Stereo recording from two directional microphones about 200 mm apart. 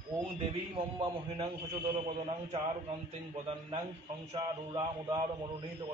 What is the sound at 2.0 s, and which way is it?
Speech, 25° right (ahead or behind).